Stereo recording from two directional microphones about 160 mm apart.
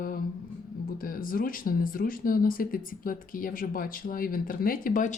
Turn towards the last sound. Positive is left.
turn(degrees=55)  # may be behind; listen again after turning